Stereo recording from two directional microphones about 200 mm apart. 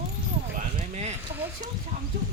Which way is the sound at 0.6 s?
35° right (ahead or behind).